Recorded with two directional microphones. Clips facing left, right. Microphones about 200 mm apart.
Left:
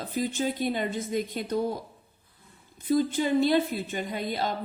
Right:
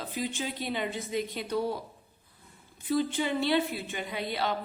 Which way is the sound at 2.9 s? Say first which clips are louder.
Left 4 dB; 45° left (ahead or behind).